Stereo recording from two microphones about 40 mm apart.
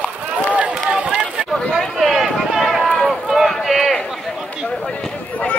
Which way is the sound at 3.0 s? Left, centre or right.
Centre.